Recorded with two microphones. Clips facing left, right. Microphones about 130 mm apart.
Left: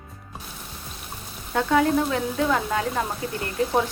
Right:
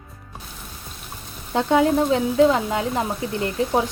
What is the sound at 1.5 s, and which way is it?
Speech, 20° right (ahead or behind).